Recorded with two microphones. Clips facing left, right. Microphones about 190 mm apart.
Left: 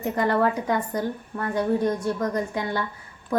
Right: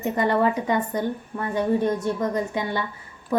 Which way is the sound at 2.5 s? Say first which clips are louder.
Right 1 dB; 5° right (ahead or behind).